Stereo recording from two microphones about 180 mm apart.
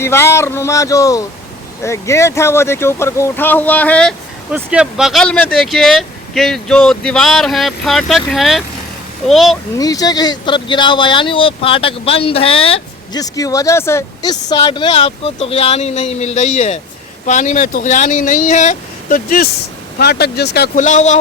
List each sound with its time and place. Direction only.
0.0 s speech: 15° left (ahead or behind)
4.5 s speech: 5° right (ahead or behind)
9.7 s speech: 20° left (ahead or behind)
13.2 s speech: 20° left (ahead or behind); by 19.5 s 50° left (ahead or behind)
20.0 s speech: 65° left (ahead or behind)
20.7 s speech: 45° left (ahead or behind)